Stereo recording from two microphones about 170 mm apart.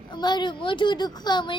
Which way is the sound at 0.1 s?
25° left (ahead or behind).